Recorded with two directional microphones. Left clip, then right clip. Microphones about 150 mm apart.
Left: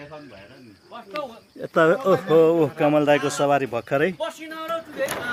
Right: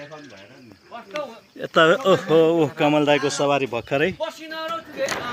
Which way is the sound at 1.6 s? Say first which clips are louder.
Right 2 dB; centre (ahead or behind).